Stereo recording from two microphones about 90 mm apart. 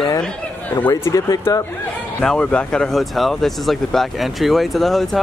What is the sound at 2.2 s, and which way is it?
Speech, 10° left (ahead or behind).